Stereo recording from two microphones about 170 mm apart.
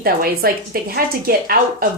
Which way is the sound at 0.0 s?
60° right (ahead or behind).